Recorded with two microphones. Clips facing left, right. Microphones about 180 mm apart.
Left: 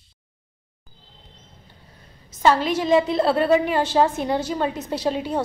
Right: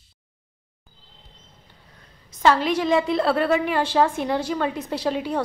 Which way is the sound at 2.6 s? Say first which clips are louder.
Even; centre (ahead or behind).